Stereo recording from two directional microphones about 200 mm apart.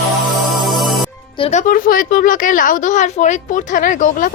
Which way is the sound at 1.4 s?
35° left (ahead or behind).